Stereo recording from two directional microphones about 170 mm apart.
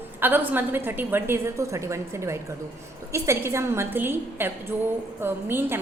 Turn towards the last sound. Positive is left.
turn(degrees=-15)  # may be behind; listen again after turning